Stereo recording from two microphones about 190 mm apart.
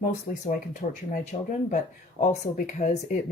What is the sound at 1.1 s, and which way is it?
Speech, 40° left (ahead or behind).